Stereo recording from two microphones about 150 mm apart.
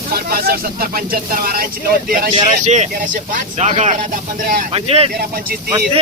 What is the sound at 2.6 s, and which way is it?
Speech, 50° right (ahead or behind).